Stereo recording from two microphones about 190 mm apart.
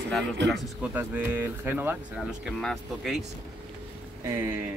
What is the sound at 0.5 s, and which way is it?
Speech, 5° right (ahead or behind).